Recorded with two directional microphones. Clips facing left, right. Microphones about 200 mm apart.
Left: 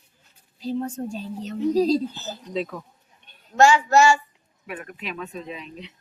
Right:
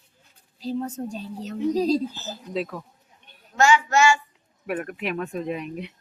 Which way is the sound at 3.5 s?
35° left (ahead or behind).